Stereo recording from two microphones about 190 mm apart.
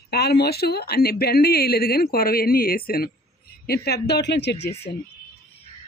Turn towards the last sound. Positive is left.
turn(degrees=60)  # may be behind; listen again after turning